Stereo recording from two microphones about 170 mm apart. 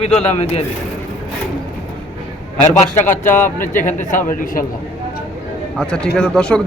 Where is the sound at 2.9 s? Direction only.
10° left (ahead or behind).